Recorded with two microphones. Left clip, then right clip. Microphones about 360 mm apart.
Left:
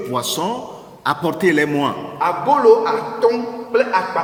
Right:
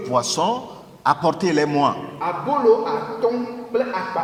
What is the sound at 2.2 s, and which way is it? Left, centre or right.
Speech, left.